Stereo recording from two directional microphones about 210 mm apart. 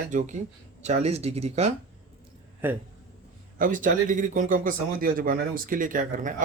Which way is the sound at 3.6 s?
40° right (ahead or behind).